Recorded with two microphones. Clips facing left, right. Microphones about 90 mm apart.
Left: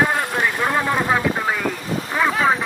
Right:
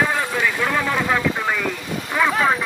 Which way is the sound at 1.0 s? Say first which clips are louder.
Left 1 dB; 15° left (ahead or behind).